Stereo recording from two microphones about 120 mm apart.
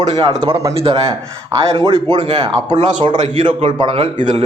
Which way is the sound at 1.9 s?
40° right (ahead or behind).